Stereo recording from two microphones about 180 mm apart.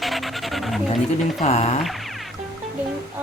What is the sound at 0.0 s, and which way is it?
Dog, centre (ahead or behind).